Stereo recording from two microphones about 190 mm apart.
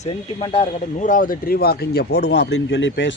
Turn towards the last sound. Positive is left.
turn(degrees=75)  # may be behind; listen again after turning